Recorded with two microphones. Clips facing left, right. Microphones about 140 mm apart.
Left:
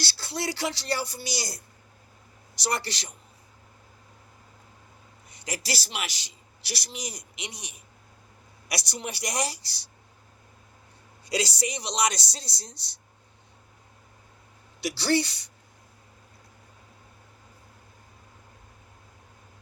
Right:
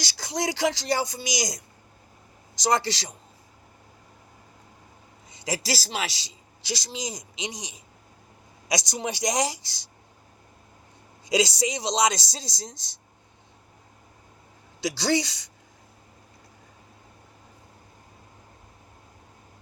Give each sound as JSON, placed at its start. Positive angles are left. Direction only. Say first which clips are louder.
{"t": 0.0, "sound": "speech", "louder": "right 3 dB", "side_deg": -90}
{"t": 2.6, "sound": "speech", "louder": "right 6 dB", "side_deg": -90}
{"t": 5.3, "sound": "speech", "louder": "right 4 dB", "side_deg": -90}
{"t": 11.3, "sound": "speech", "louder": "right 5 dB", "side_deg": -90}
{"t": 14.8, "sound": "speech", "louder": "right 1 dB", "side_deg": -90}